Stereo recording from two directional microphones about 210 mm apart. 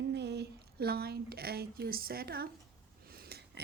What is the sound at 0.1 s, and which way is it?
A woman's voice, 55° right (ahead or behind).